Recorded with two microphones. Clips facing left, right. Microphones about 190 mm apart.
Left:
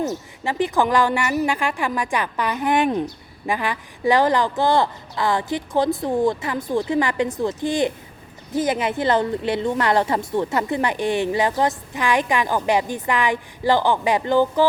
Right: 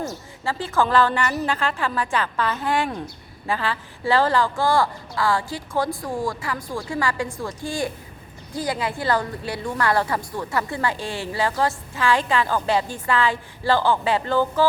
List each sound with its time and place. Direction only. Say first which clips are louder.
0.0 s a woman's voice: left 4 dB; 20° left (ahead or behind)